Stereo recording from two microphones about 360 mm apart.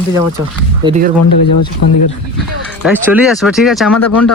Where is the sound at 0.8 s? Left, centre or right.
Centre.